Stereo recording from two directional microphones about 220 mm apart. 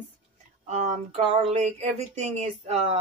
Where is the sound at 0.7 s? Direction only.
30° right (ahead or behind).